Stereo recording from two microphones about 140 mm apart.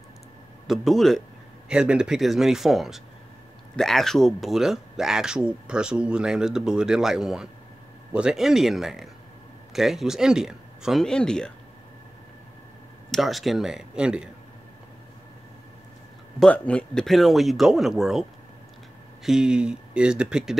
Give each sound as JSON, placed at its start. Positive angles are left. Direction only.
{"t": 0.7, "sound": "speech", "side_deg": 0}
{"t": 13.1, "sound": "speech", "side_deg": 0}
{"t": 16.3, "sound": "speech", "side_deg": 10}
{"t": 19.2, "sound": "speech", "side_deg": -5}